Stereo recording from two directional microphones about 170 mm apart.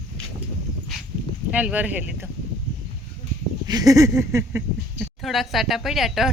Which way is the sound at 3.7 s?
20° right (ahead or behind).